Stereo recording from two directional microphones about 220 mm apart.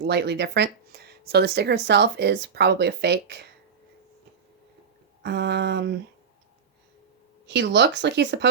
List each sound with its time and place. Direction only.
0.0 s speech: 50° right (ahead or behind)
5.2 s speech: 50° right (ahead or behind)
7.4 s speech: 50° right (ahead or behind)